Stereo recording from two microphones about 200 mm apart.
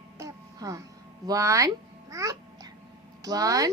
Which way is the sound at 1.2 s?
15° right (ahead or behind).